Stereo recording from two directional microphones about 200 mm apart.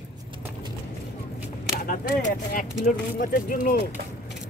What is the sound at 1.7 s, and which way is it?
Speech, 50° left (ahead or behind).